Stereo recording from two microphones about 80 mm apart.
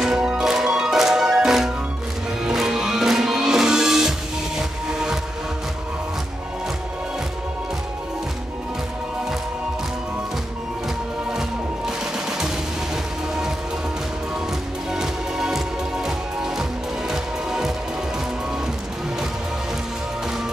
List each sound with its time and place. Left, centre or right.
0.0 s music: centre
11.3 s music: centre
14.9 s music: centre